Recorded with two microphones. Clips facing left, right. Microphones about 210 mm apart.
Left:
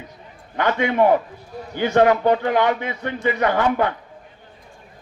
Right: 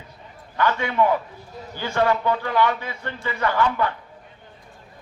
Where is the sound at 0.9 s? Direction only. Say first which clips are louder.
Left 4 dB; 45° left (ahead or behind).